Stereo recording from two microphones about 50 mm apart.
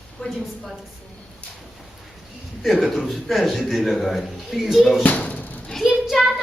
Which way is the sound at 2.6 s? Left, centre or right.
Centre.